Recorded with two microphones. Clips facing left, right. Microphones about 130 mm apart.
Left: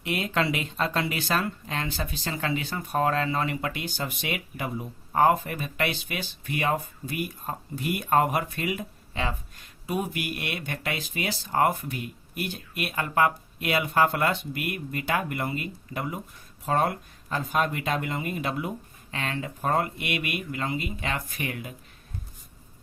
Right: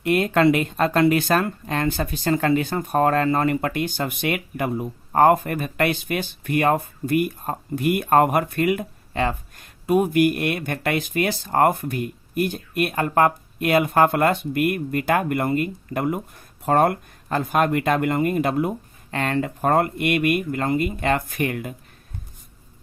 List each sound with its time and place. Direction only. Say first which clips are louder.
0.0 s speech: right 9 dB; 50° right (ahead or behind)